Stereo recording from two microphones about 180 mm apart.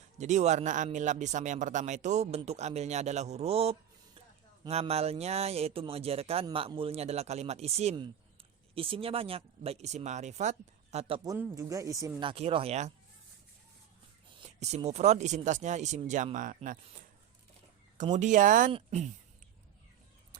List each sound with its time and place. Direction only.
0.2 s speech: 40° right (ahead or behind)
11.2 s speech: 15° right (ahead or behind)
12.3 s speech: 30° right (ahead or behind)
14.4 s speech: 35° right (ahead or behind)
18.1 s speech: 45° right (ahead or behind)